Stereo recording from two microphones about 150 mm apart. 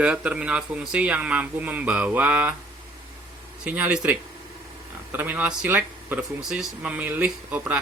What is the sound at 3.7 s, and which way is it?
Speech, 10° right (ahead or behind).